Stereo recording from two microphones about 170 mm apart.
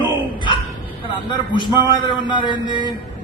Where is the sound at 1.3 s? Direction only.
30° left (ahead or behind).